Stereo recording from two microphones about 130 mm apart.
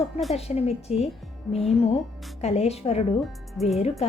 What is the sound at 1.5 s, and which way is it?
Speech, centre (ahead or behind).